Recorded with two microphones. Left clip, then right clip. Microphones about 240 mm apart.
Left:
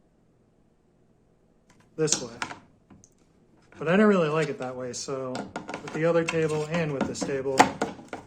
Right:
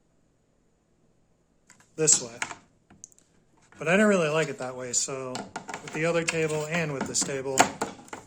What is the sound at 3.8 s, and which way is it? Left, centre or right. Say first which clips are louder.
Speech: even; centre.